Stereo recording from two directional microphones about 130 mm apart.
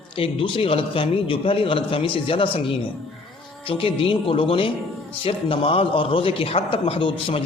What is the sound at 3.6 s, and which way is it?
A man's voice, 45° left (ahead or behind).